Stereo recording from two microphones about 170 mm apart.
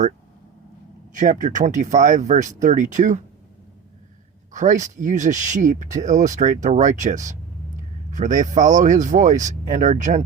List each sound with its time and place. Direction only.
1.1 s speech: 50° right (ahead or behind)
4.5 s speech: 45° right (ahead or behind)